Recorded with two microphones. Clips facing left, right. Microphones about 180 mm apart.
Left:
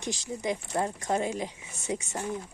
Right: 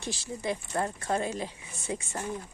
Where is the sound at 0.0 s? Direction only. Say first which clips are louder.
Left 2 dB; 15° left (ahead or behind).